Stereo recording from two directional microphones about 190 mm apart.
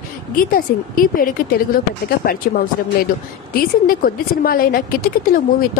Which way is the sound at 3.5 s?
50° left (ahead or behind).